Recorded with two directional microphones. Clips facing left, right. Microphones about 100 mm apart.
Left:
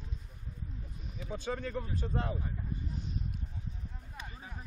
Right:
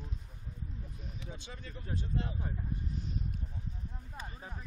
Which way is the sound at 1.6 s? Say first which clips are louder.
Left 11 dB; 70° left (ahead or behind).